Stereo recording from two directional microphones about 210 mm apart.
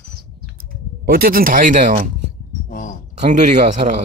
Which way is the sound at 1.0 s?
45° right (ahead or behind).